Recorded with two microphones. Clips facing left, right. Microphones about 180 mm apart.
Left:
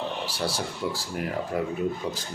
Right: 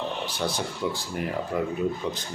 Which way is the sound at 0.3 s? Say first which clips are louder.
Right 1 dB; 5° left (ahead or behind).